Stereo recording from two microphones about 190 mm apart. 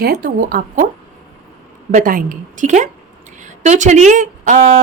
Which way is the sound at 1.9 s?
45° right (ahead or behind).